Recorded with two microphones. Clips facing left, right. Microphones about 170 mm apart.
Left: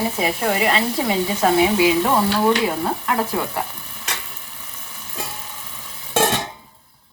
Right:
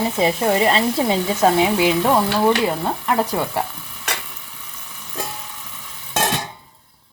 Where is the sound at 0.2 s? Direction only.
30° right (ahead or behind).